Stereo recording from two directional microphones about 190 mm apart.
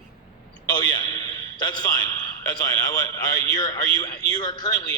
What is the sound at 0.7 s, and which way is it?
A man's voice, 20° left (ahead or behind).